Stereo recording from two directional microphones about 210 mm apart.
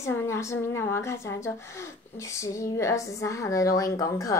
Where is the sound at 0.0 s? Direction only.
10° left (ahead or behind).